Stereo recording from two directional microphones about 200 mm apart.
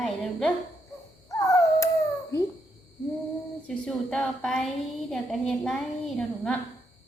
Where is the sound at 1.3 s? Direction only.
15° left (ahead or behind).